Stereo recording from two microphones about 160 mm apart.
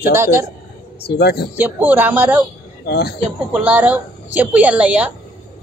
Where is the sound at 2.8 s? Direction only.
90° left.